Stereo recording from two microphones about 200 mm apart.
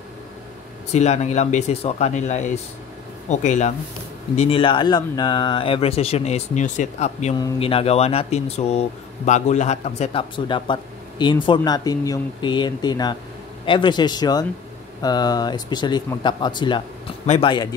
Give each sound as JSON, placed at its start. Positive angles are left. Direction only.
{"t": 0.9, "sound": "speech", "side_deg": 35}
{"t": 7.3, "sound": "speech", "side_deg": 25}